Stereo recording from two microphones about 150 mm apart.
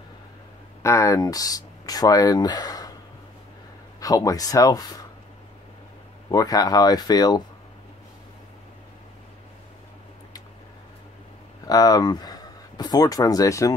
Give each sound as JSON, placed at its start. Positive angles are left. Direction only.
{"t": 0.8, "sound": "speech", "side_deg": 20}
{"t": 4.0, "sound": "speech", "side_deg": 25}
{"t": 6.2, "sound": "speech", "side_deg": 25}
{"t": 11.6, "sound": "speech", "side_deg": 25}